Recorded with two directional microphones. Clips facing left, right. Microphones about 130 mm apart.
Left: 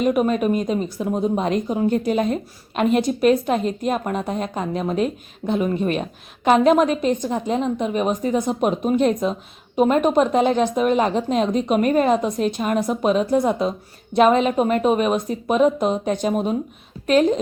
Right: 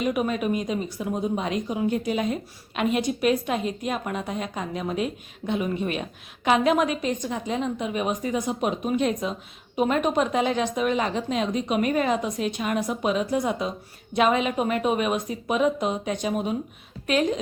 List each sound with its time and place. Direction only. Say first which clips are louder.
0.0 s a woman's voice: left 6 dB; 45° left (ahead or behind)